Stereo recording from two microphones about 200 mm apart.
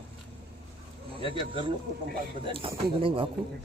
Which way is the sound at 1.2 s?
25° right (ahead or behind).